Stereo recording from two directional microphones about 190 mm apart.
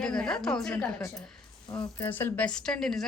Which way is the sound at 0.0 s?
5° left (ahead or behind).